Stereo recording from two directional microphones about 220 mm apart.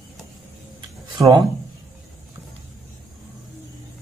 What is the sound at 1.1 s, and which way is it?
Speech, 15° right (ahead or behind).